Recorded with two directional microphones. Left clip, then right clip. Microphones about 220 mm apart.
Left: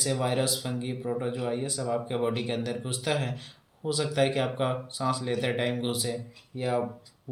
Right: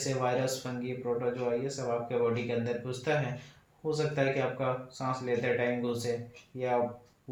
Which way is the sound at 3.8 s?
45° left (ahead or behind).